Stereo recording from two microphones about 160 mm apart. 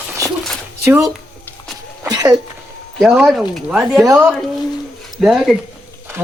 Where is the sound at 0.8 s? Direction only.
20° right (ahead or behind).